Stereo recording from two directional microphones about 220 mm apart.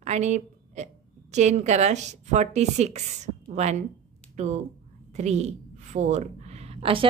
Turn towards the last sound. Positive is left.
turn(degrees=-25)  # may be behind; listen again after turning